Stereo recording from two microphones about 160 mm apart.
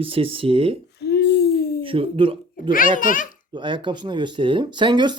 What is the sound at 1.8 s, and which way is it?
Speech, 35° right (ahead or behind).